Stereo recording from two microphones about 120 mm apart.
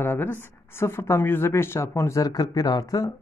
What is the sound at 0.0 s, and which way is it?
Speech, 15° left (ahead or behind).